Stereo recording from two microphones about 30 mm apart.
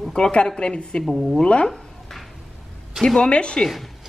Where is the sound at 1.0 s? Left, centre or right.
Centre.